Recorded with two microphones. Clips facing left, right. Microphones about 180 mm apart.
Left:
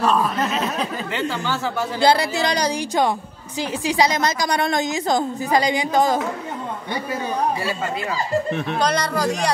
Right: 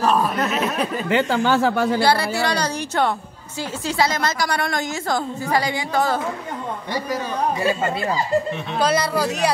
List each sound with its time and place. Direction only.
0.0 s speech: 10° right (ahead or behind)
1.1 s speech: 60° right (ahead or behind)
2.0 s a woman's voice: 20° left (ahead or behind)
8.7 s speech: 5° right (ahead or behind)